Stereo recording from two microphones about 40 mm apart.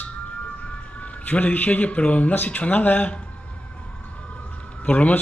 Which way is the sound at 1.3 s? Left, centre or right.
Left.